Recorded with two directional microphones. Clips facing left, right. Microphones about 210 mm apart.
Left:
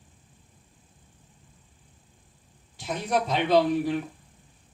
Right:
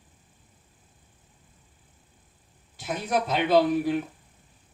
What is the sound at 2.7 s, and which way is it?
Speech, 5° right (ahead or behind).